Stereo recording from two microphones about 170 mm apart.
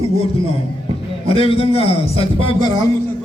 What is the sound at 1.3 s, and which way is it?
A man's voice, 35° left (ahead or behind).